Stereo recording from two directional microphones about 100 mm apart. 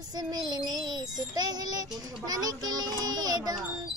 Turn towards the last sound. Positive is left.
turn(degrees=-40)  # may be behind; listen again after turning